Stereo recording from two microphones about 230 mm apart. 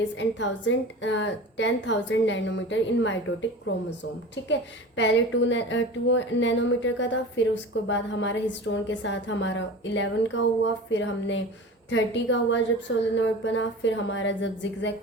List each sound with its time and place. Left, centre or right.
0.2 s speech: left